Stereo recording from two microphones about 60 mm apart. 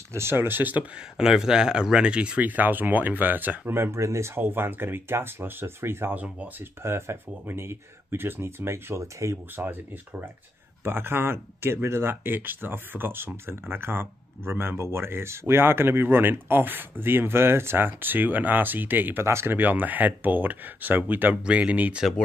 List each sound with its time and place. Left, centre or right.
0.1 s speech: right
1.1 s speech: centre; by 6.1 s right
6.1 s speech: right
6.8 s speech: right
9.0 s speech: right
10.8 s speech: right
19.2 s speech: right
19.5 s speech: right